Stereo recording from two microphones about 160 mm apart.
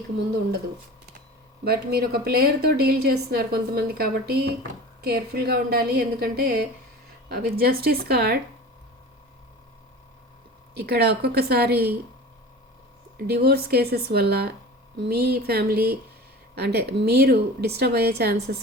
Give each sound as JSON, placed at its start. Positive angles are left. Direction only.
{"t": 1.6, "sound": "a woman's voice", "side_deg": -75}
{"t": 10.8, "sound": "a woman's voice", "side_deg": -90}
{"t": 13.1, "sound": "a woman's voice", "side_deg": -80}
{"t": 16.6, "sound": "a woman's voice", "side_deg": -90}